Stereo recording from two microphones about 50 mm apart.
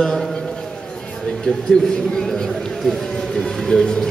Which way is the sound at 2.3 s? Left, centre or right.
Centre.